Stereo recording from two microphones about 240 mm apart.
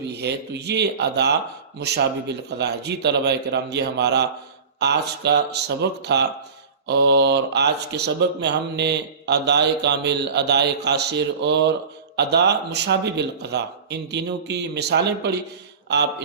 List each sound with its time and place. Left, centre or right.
0.1 s speech: right